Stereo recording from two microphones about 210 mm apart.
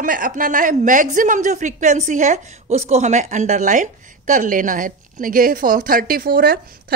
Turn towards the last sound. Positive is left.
turn(degrees=-45)  # may be behind; listen again after turning